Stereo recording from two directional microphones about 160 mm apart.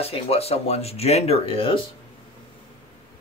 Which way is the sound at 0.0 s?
40° left (ahead or behind).